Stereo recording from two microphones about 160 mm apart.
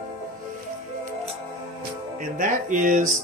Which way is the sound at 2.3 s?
55° right (ahead or behind).